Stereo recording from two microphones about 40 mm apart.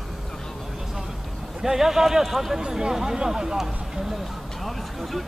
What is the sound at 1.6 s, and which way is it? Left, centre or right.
A man's voice, centre.